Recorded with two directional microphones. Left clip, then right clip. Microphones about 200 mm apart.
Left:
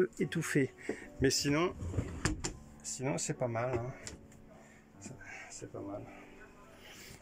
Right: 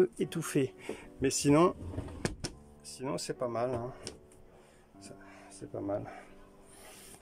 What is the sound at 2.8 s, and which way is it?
Speech, centre (ahead or behind).